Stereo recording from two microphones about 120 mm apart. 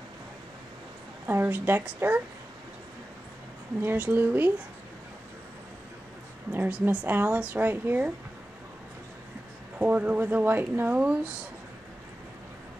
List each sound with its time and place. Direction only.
1.2 s speech: 15° right (ahead or behind)
3.8 s speech: 15° right (ahead or behind)
6.5 s speech: 15° right (ahead or behind)
9.8 s speech: 15° right (ahead or behind)